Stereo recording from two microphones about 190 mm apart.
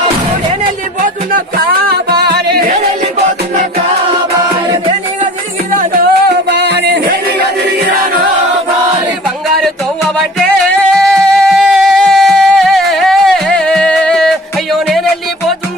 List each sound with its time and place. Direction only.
1.9 s music: 55° right (ahead or behind)
5.7 s music: 55° right (ahead or behind)
9.6 s music: centre (ahead or behind)